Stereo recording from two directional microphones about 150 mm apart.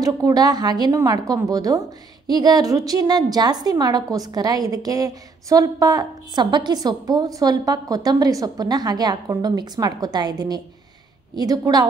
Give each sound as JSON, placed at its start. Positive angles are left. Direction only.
{"t": 0.0, "sound": "a woman's voice", "side_deg": -25}